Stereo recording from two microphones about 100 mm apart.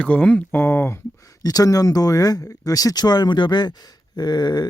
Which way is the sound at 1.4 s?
35° left (ahead or behind).